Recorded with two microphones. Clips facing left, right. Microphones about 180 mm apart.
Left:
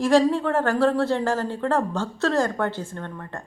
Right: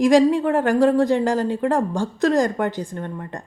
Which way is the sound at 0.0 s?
15° right (ahead or behind).